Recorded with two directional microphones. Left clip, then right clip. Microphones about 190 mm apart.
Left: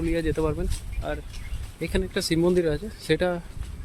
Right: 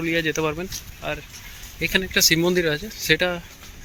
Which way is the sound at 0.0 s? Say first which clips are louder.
Right 3 dB; centre (ahead or behind).